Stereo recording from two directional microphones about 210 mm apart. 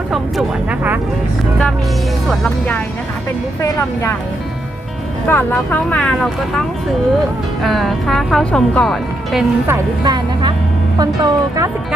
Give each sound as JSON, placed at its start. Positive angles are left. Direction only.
{"t": 0.1, "sound": "speech", "side_deg": -5}
{"t": 2.3, "sound": "speech", "side_deg": 5}
{"t": 5.3, "sound": "speech", "side_deg": 10}
{"t": 7.6, "sound": "speech", "side_deg": 0}
{"t": 9.6, "sound": "speech", "side_deg": -15}